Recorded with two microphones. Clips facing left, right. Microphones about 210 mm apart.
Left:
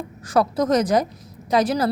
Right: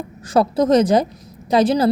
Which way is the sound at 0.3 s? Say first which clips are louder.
Right 4 dB; 25° right (ahead or behind).